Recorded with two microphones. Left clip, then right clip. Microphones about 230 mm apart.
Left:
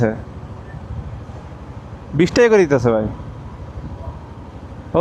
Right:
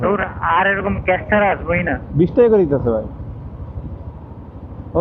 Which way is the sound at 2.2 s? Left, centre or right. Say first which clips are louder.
Left 1 dB; left.